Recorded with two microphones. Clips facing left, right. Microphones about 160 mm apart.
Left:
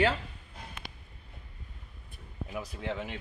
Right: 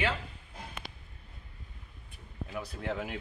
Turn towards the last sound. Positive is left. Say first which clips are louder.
# even
turn(degrees=-5)  # may be behind; listen again after turning